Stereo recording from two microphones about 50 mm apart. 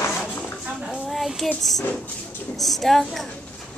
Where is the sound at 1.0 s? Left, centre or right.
Centre.